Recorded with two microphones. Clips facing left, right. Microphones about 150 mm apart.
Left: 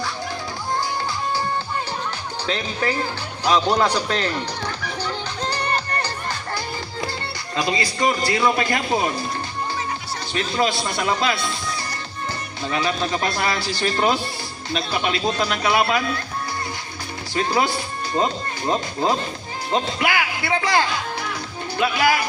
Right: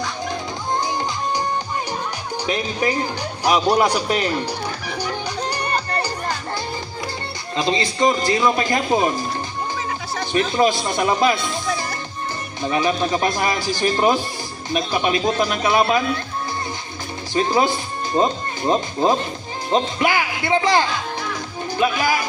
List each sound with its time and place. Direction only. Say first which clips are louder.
0.7 s music: right 2 dB; 20° right (ahead or behind)
2.5 s speech: right 2 dB; 15° right (ahead or behind)
3.4 s music: right 2 dB; 10° right (ahead or behind)
7.5 s speech: right 2 dB; 25° right (ahead or behind)
10.6 s speech: right 2 dB; 20° right (ahead or behind)
12.6 s speech: right 4 dB; 20° right (ahead or behind)
17.3 s speech: right 3 dB; 20° right (ahead or behind)